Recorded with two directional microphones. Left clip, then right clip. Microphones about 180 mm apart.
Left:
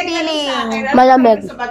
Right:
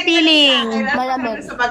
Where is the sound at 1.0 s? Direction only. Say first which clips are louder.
Left 12 dB; 65° left (ahead or behind).